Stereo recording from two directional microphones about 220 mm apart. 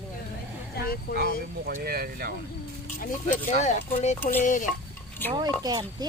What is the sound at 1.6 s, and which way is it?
Speech, 45° right (ahead or behind).